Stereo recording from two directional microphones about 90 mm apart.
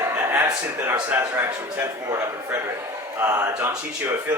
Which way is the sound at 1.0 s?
25° right (ahead or behind).